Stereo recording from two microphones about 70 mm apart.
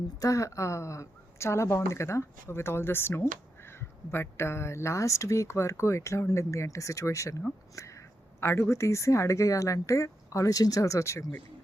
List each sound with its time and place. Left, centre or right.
0.2 s speech: left